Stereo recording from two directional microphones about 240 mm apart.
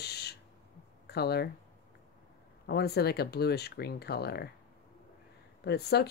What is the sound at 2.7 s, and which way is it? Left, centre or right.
Speech, left.